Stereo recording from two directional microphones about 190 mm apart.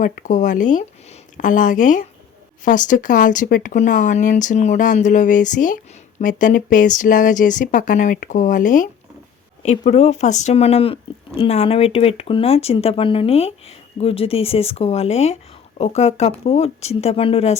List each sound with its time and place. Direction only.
0.0 s speech: 40° left (ahead or behind)